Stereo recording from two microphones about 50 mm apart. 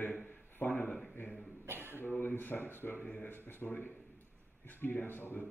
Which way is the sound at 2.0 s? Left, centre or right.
Left.